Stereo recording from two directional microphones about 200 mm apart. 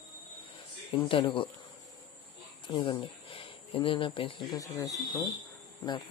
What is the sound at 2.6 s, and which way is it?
Speech, 25° left (ahead or behind).